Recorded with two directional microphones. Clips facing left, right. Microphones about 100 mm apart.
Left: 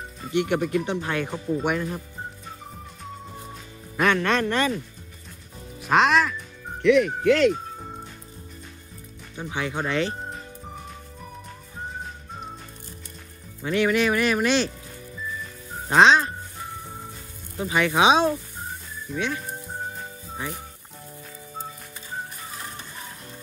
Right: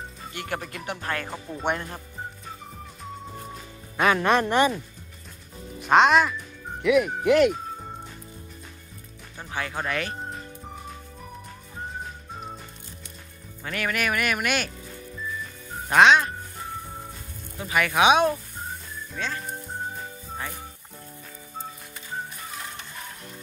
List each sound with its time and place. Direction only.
0.3 s speech: 20° left (ahead or behind)
1.0 s speech: 10° left (ahead or behind)
3.9 s music: 5° right (ahead or behind)
4.2 s speech: 15° right (ahead or behind)
5.8 s speech: centre (ahead or behind)
9.5 s speech: 15° left (ahead or behind)
13.7 s speech: 20° left (ahead or behind)
15.9 s speech: 30° left (ahead or behind)
17.6 s speech: 25° left (ahead or behind)
19.1 s speech: 10° left (ahead or behind)